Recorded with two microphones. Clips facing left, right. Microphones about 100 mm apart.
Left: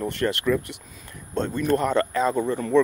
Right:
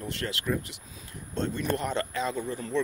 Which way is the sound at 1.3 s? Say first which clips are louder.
Left 6 dB; 45° left (ahead or behind).